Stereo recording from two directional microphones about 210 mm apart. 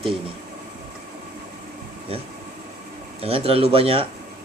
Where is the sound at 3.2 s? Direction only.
25° right (ahead or behind).